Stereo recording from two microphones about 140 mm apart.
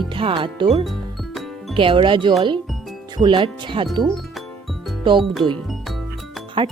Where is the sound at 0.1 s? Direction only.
40° right (ahead or behind).